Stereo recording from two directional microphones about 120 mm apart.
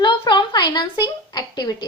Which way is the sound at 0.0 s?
40° left (ahead or behind).